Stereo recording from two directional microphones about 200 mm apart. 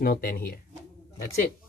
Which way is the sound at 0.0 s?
45° left (ahead or behind).